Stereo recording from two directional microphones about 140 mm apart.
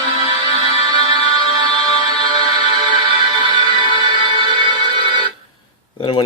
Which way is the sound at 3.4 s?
30° right (ahead or behind).